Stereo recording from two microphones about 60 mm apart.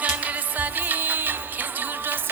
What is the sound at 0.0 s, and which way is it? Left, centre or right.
Music, right.